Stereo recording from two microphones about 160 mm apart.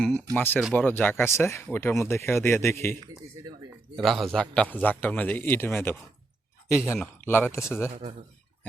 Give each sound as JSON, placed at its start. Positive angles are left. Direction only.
{"t": 0.3, "sound": "a man's voice", "side_deg": 10}
{"t": 3.9, "sound": "a man's voice", "side_deg": 0}